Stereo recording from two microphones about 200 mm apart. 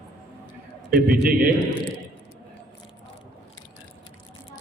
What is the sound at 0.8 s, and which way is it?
Speech, 50° right (ahead or behind).